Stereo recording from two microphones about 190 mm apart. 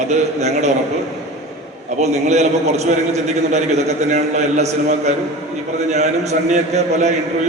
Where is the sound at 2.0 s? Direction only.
35° right (ahead or behind).